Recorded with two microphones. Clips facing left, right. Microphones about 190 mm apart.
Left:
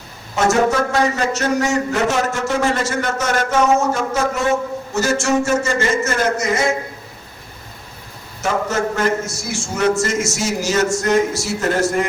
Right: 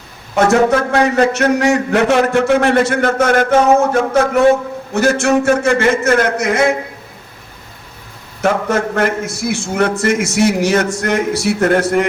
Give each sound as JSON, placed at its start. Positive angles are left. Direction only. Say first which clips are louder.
{"t": 0.3, "sound": "a man's voice", "louder": "right 4 dB", "side_deg": -60}
{"t": 8.4, "sound": "a man's voice", "louder": "right 4 dB", "side_deg": -60}